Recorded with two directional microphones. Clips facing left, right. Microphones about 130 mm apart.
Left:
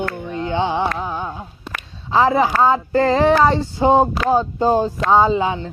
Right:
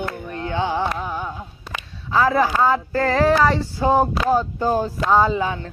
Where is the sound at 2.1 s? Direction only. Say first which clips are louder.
Left 2 dB; 25° left (ahead or behind).